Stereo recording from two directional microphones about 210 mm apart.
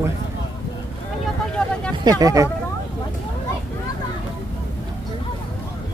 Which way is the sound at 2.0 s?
15° right (ahead or behind).